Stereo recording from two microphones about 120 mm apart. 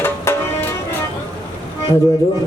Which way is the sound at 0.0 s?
20° left (ahead or behind).